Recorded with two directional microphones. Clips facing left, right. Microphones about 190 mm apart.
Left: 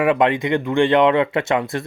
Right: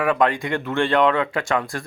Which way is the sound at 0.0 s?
25° left (ahead or behind).